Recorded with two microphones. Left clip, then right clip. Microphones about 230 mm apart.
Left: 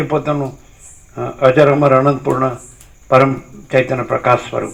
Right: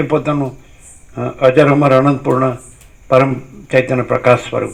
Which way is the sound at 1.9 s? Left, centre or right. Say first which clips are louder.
Right 1 dB; right.